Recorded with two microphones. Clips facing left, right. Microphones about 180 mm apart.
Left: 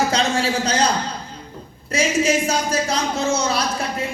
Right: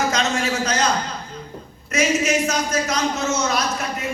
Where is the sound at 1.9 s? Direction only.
30° left (ahead or behind).